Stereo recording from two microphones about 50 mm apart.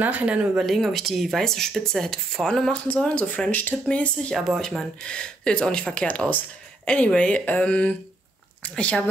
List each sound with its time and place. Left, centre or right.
0.0 s speech: right
0.7 s speech: centre
2.7 s speech: left
4.6 s speech: centre; by 9.1 s left